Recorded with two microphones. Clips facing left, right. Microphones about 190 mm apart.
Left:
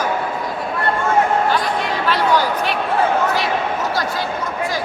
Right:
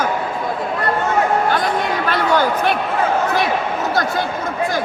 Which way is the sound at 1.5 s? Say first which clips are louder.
Right 1 dB; 50° right (ahead or behind).